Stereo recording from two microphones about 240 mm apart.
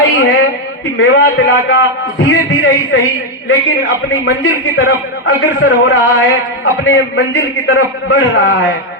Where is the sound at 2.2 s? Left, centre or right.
Left.